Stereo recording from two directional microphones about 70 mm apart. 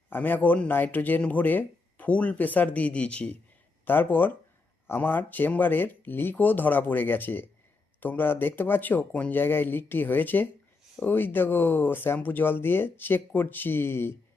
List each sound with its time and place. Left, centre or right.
0.1 s speech: left
3.8 s speech: left